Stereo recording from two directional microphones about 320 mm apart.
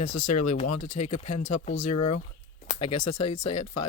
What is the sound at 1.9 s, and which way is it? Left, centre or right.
Speech, left.